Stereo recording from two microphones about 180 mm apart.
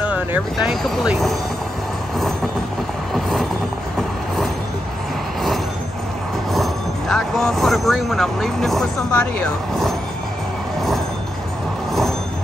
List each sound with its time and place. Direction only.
0.1 s speech: 5° right (ahead or behind)
6.5 s speech: centre (ahead or behind)